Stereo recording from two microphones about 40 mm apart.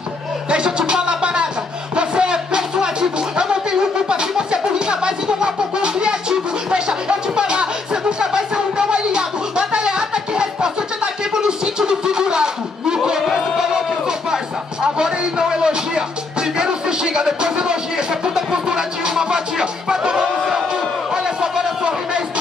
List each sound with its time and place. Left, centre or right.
0.5 s music: right
11.3 s a sound: centre
13.6 s music: centre